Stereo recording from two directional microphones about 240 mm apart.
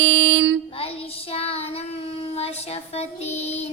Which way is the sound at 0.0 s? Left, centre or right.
Right.